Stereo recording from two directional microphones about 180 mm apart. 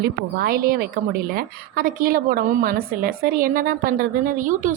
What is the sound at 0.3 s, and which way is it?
A woman's voice, 55° right (ahead or behind).